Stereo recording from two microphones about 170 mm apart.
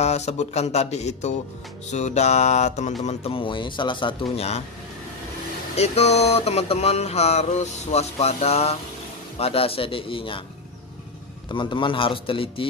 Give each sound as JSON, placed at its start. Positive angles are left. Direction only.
{"t": 0.0, "sound": "speech", "side_deg": 40}
{"t": 5.8, "sound": "speech", "side_deg": 40}
{"t": 11.5, "sound": "speech", "side_deg": 30}